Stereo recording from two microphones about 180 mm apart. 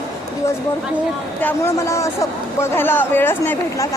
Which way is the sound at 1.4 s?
10° left (ahead or behind).